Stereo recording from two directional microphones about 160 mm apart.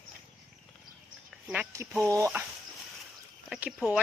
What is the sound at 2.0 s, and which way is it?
Speech, 20° right (ahead or behind).